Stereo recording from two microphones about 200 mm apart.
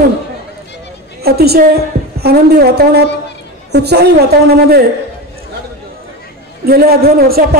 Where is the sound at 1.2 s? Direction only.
50° right (ahead or behind).